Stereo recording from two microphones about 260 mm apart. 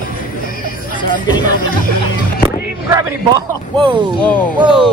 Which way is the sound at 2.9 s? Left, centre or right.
Centre.